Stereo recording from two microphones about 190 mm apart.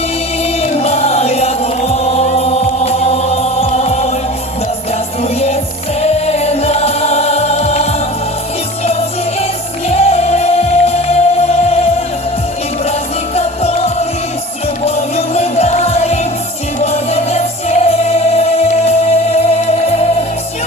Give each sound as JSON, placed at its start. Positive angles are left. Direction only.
{"t": 0.6, "sound": "music", "side_deg": 35}
{"t": 6.0, "sound": "music", "side_deg": 35}
{"t": 9.9, "sound": "music", "side_deg": 35}
{"t": 13.3, "sound": "music", "side_deg": 35}